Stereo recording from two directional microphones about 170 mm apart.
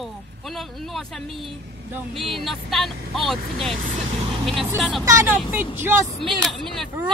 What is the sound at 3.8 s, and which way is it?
Speech, 40° right (ahead or behind).